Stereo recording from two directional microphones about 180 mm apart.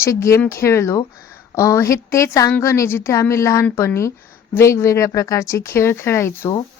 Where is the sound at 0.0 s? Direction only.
15° left (ahead or behind).